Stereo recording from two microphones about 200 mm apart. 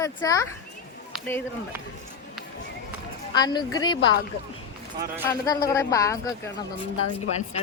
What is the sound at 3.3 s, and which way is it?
Speech, 20° left (ahead or behind).